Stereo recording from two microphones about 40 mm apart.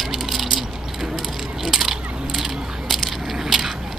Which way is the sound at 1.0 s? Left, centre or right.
Centre.